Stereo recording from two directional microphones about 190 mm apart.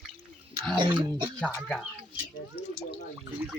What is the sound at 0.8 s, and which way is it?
Speech, 25° right (ahead or behind).